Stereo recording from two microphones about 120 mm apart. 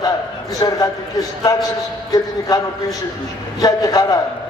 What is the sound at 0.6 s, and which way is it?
A man's voice, 30° left (ahead or behind).